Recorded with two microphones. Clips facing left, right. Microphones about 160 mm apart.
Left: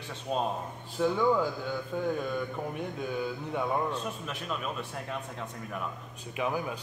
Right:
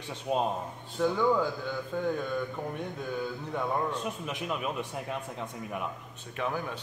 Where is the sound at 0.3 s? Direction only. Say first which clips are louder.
Right 2 dB; 15° right (ahead or behind).